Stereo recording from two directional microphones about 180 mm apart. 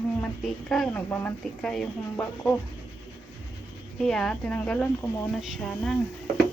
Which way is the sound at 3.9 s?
Centre (ahead or behind).